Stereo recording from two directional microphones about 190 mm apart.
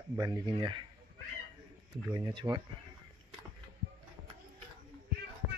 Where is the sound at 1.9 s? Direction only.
25° right (ahead or behind).